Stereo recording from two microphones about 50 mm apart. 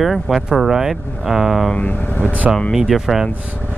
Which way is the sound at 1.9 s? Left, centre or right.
Left.